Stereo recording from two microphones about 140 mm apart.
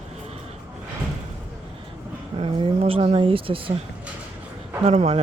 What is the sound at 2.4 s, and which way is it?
Speech, 40° right (ahead or behind).